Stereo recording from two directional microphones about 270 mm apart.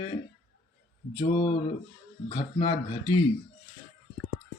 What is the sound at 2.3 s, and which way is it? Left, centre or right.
Speech, centre.